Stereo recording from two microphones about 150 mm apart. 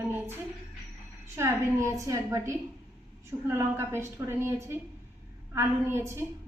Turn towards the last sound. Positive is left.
turn(degrees=-15)  # may be behind; listen again after turning